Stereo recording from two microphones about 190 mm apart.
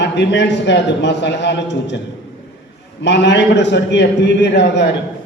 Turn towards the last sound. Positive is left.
turn(degrees=65)  # may be behind; listen again after turning